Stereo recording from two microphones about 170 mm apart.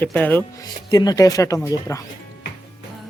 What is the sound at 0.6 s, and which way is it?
Speech, 25° left (ahead or behind).